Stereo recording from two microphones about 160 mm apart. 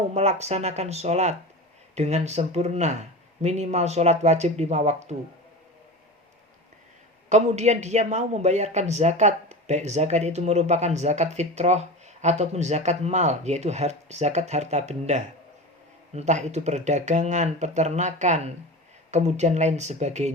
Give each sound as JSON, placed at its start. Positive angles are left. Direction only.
{"t": 0.1, "sound": "a man's voice", "side_deg": -45}
{"t": 7.3, "sound": "a man's voice", "side_deg": -45}